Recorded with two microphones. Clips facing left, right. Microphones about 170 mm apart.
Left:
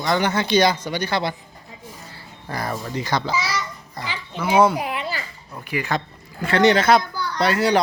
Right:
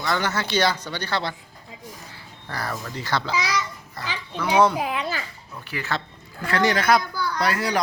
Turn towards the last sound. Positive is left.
turn(degrees=25)  # may be behind; listen again after turning